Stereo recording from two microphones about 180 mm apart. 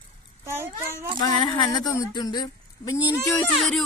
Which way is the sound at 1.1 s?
20° left (ahead or behind).